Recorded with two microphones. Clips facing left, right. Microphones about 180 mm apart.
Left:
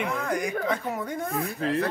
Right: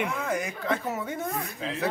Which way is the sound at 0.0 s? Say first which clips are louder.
Left 1 dB; 5° right (ahead or behind).